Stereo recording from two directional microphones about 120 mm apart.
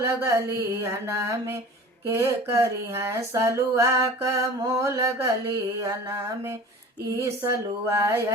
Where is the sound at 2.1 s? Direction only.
20° right (ahead or behind).